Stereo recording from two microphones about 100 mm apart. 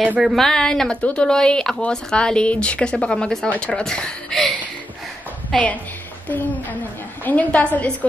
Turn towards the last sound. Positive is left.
turn(degrees=15)  # may be behind; listen again after turning